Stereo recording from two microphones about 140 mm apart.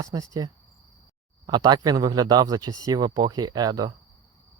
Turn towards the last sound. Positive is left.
turn(degrees=-30)  # may be behind; listen again after turning